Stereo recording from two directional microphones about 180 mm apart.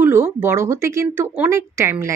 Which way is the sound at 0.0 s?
15° right (ahead or behind).